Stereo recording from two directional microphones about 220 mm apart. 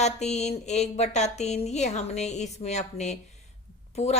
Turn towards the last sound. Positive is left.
turn(degrees=30)  # may be behind; listen again after turning